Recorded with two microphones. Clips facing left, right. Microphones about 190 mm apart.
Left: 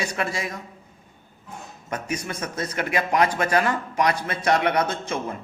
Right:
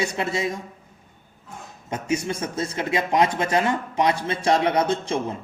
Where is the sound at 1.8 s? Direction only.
25° right (ahead or behind).